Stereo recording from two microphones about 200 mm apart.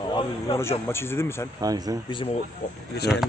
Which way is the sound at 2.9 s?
55° left (ahead or behind).